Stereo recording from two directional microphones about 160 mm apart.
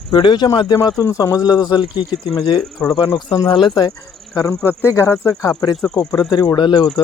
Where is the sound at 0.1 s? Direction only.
30° left (ahead or behind).